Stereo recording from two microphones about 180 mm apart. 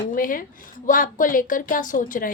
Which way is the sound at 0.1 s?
50° left (ahead or behind).